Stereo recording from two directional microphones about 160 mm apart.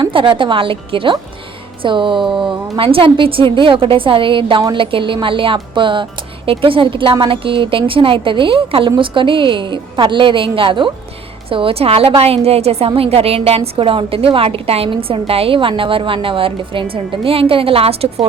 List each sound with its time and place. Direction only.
0.0 s a woman's voice: 35° right (ahead or behind)
2.2 s speech: 5° right (ahead or behind)
2.7 s a woman's voice: 35° right (ahead or behind)